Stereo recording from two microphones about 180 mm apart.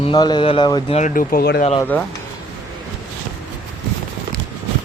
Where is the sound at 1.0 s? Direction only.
50° left (ahead or behind).